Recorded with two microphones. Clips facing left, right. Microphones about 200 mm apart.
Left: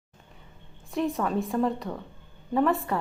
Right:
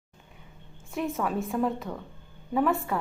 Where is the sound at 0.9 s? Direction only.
Centre (ahead or behind).